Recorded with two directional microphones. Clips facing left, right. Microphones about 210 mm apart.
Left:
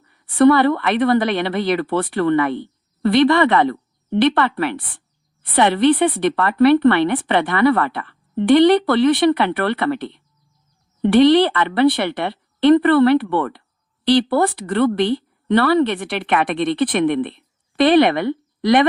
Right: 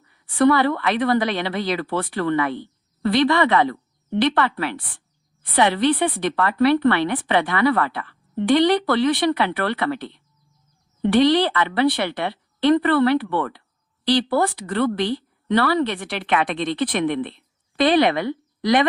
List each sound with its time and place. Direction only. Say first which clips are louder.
0.3 s speech: left 4 dB; 55° left (ahead or behind)